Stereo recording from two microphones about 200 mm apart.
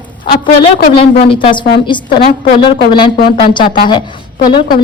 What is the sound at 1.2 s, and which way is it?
A woman's voice, 25° left (ahead or behind).